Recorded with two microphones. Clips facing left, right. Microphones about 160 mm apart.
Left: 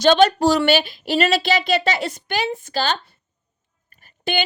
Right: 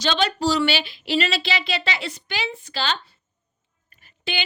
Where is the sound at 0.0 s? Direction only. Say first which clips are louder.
Left 8 dB; 50° left (ahead or behind).